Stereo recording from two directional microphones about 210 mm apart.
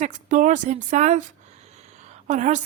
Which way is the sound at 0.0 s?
35° right (ahead or behind).